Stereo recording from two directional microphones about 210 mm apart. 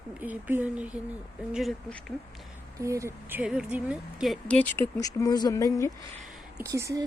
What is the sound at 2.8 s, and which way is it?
A woman's voice, 15° right (ahead or behind).